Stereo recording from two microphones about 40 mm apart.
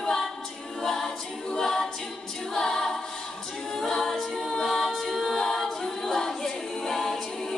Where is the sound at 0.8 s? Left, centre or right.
Centre.